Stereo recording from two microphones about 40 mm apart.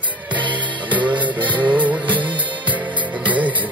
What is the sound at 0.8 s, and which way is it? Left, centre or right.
Music, right.